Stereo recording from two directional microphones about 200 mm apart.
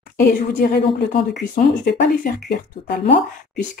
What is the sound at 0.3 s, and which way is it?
Speech, 45° left (ahead or behind).